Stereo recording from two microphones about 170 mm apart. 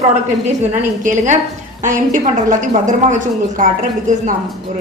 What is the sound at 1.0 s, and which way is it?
A woman's voice, 45° right (ahead or behind).